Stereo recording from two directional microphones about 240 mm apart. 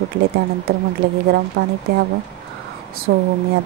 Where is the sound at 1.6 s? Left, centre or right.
Right.